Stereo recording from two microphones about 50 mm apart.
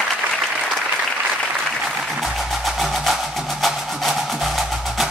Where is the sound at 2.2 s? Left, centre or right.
Centre.